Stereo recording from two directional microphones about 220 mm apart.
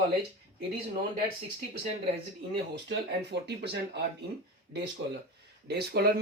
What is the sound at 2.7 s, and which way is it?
Speech, 50° right (ahead or behind).